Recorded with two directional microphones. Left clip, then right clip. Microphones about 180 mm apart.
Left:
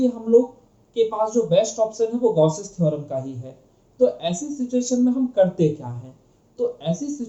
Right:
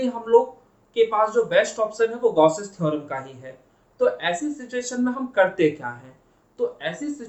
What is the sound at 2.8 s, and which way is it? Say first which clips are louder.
A man's voice: left 3 dB; 15° right (ahead or behind).